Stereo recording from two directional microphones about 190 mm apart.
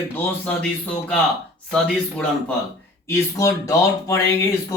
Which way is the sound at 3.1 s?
15° left (ahead or behind).